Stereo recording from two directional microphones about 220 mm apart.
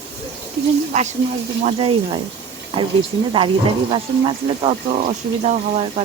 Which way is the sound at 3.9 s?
25° right (ahead or behind).